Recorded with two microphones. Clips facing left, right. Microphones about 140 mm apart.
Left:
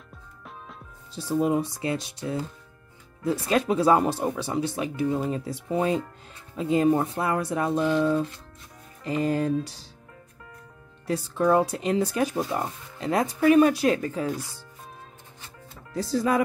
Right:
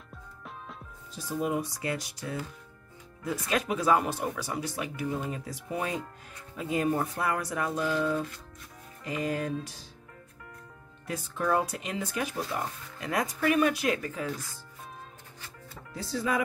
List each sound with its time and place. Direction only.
1.1 s speech: 30° left (ahead or behind)
11.1 s speech: 35° left (ahead or behind)
15.9 s speech: 40° left (ahead or behind)